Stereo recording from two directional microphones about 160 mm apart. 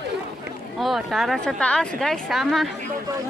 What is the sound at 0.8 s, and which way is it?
Speech, centre (ahead or behind).